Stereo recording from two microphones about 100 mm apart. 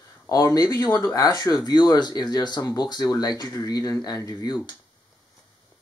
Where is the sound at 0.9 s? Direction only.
20° left (ahead or behind).